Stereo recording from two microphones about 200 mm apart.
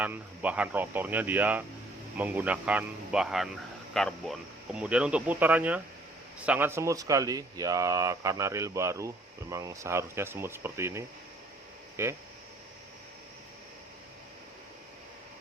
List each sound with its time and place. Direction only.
0.0 s speech: 5° right (ahead or behind)